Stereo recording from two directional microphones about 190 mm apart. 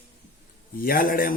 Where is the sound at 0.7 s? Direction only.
50° left (ahead or behind).